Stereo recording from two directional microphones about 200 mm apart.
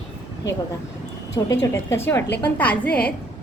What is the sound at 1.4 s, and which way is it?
A woman's voice, 20° left (ahead or behind).